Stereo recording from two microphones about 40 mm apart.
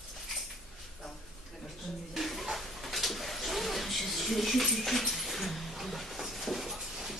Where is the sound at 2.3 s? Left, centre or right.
Centre.